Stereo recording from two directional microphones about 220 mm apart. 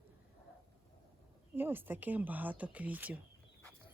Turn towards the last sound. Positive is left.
turn(degrees=-5)  # may be behind; listen again after turning